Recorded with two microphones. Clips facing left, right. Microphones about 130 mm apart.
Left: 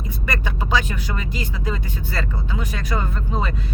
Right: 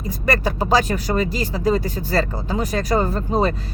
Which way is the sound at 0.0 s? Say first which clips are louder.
Right 7 dB; 35° right (ahead or behind).